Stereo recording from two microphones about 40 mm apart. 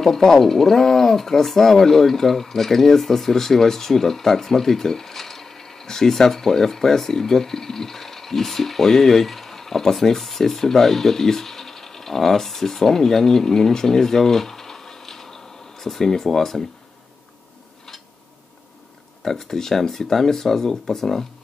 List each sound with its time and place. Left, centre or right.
0.0 s speech: centre
19.2 s speech: centre